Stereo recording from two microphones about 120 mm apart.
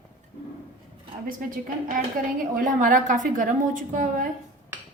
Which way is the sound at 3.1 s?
90° right.